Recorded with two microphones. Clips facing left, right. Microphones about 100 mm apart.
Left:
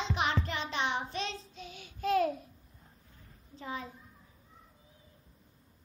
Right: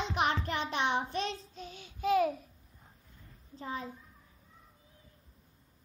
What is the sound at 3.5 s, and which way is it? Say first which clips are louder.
Speech: right 1 dB; 35° right (ahead or behind).